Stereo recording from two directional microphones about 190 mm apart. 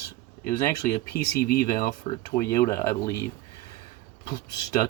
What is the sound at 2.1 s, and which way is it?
Speech, 30° left (ahead or behind).